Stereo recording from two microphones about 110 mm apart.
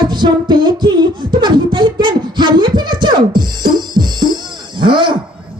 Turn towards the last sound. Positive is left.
turn(degrees=-45)  # may be behind; listen again after turning